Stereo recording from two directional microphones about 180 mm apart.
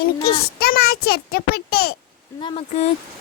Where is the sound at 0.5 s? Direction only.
60° left (ahead or behind).